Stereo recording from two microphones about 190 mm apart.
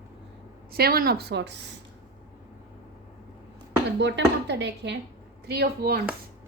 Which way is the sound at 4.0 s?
65° right (ahead or behind).